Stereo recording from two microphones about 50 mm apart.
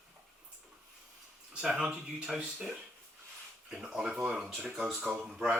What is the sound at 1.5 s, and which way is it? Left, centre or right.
Speech, centre.